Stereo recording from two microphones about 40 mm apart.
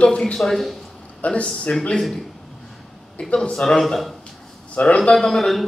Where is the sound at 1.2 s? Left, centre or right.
Left.